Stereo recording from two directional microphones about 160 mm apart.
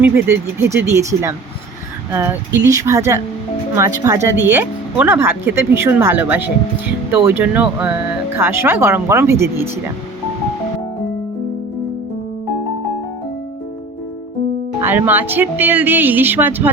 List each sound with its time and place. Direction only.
0.0 s speech: 15° right (ahead or behind)
2.6 s speech: 20° right (ahead or behind)
14.8 s speech: 15° right (ahead or behind)